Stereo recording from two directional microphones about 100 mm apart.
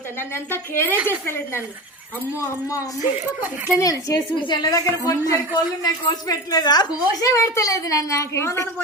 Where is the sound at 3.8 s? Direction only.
35° left (ahead or behind).